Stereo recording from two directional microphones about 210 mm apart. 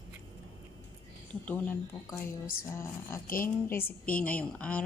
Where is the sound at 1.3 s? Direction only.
5° left (ahead or behind).